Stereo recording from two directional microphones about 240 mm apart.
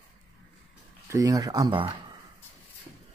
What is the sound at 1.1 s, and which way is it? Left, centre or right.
Speech, centre.